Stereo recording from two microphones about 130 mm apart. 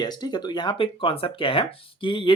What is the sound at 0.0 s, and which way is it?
Speech, 30° left (ahead or behind).